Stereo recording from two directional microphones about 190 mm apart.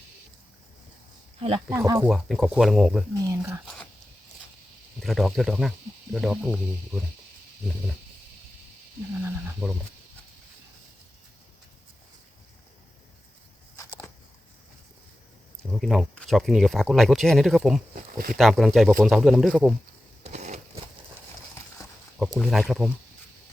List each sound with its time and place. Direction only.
1.4 s speech: 25° right (ahead or behind)
1.7 s speech: 15° right (ahead or behind)
2.0 s speech: centre (ahead or behind)
3.2 s speech: 15° right (ahead or behind)
4.9 s speech: centre (ahead or behind)
9.2 s speech: 5° right (ahead or behind)
15.8 s speech: centre (ahead or behind)
17.9 s speech: 45° right (ahead or behind)
18.3 s speech: centre (ahead or behind)
20.2 s a sound: 35° right (ahead or behind)
22.2 s speech: centre (ahead or behind)